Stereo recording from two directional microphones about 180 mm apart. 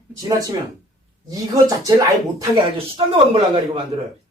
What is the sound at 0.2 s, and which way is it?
Speech, 20° right (ahead or behind).